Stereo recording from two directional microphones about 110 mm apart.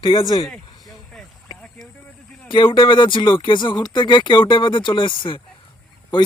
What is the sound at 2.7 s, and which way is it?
Speech, 45° left (ahead or behind).